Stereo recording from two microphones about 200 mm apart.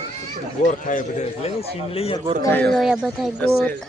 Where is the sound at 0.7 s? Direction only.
40° left (ahead or behind).